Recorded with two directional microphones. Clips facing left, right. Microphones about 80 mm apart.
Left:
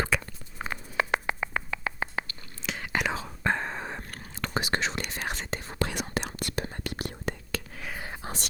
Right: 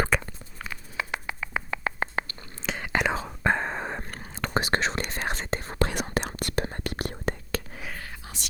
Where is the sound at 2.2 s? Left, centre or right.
Right.